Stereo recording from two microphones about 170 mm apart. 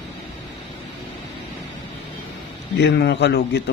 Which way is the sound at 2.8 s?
80° left.